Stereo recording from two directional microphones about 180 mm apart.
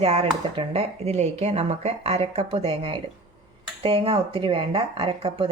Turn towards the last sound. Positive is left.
turn(degrees=-30)  # may be behind; listen again after turning